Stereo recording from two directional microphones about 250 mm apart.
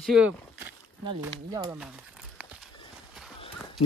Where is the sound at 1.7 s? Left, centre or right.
Centre.